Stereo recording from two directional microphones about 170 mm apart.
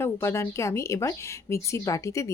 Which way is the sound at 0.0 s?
15° left (ahead or behind).